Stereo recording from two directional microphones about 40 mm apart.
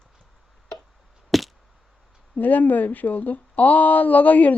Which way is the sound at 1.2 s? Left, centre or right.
Centre.